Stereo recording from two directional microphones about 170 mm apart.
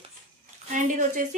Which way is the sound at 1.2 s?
50° right (ahead or behind).